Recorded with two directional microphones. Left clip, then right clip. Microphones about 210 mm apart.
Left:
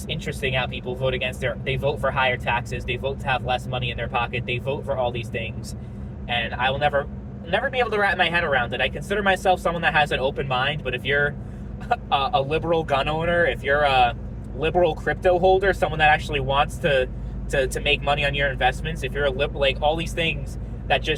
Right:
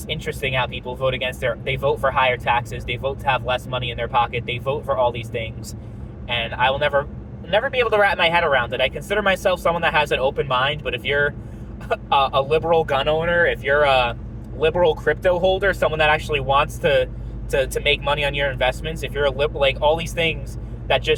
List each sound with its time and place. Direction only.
0.6 s speech: 25° right (ahead or behind)